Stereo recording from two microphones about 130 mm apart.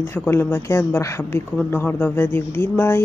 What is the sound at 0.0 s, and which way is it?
A woman's voice, 20° left (ahead or behind).